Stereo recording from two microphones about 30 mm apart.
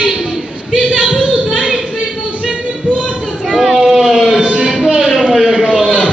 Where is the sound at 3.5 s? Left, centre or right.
Centre.